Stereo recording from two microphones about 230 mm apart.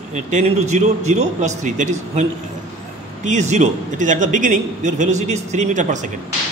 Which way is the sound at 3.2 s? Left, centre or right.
Right.